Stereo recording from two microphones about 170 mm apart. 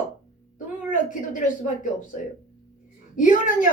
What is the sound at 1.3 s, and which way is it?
Speech, 50° left (ahead or behind).